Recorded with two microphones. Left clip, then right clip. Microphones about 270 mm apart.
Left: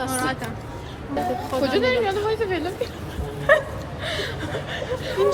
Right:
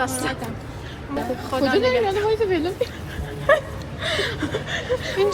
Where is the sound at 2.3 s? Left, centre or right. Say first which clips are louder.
Right 3 dB; right.